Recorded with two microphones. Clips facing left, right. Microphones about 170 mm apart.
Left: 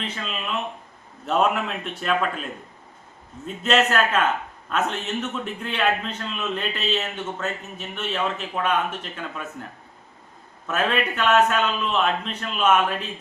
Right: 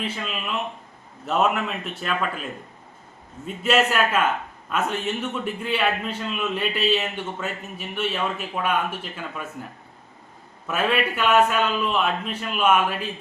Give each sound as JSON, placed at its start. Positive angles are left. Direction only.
{"t": 0.0, "sound": "a man's voice", "side_deg": -5}
{"t": 3.4, "sound": "a man's voice", "side_deg": -10}
{"t": 10.7, "sound": "a man's voice", "side_deg": -10}